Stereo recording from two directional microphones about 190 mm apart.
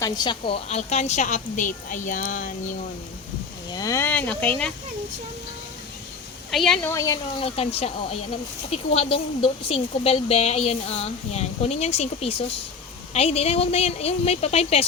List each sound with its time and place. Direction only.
0.0 s speech: 25° left (ahead or behind); by 2.7 s 45° left (ahead or behind)
3.7 s speech: 20° left (ahead or behind)
6.5 s speech: centre (ahead or behind)
6.9 s speech: 15° left (ahead or behind)
7.4 s speech: 30° left (ahead or behind)